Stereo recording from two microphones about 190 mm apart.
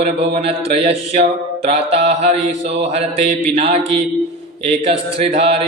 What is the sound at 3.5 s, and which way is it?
Mantra, 30° right (ahead or behind).